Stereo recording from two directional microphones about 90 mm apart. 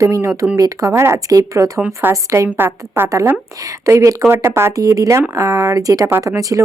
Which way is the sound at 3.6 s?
35° right (ahead or behind).